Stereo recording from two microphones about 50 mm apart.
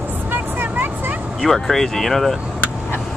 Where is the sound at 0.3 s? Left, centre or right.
Right.